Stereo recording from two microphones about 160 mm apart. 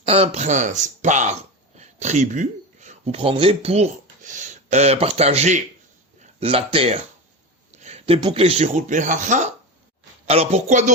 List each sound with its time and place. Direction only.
0.0 s speech: 40° right (ahead or behind)
6.4 s speech: 35° right (ahead or behind)
10.2 s a woman's voice: 40° right (ahead or behind)